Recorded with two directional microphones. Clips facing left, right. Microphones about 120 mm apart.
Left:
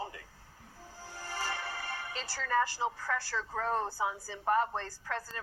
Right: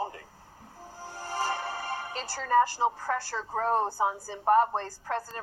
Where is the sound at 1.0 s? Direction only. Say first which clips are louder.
Right 7 dB; 50° right (ahead or behind).